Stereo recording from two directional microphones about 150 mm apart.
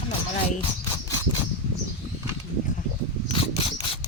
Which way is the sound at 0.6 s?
30° left (ahead or behind).